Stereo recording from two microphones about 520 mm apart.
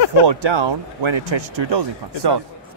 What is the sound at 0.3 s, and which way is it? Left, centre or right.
Speech, right.